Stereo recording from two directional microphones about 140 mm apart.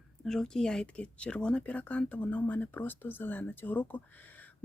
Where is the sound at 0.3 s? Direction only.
5° left (ahead or behind).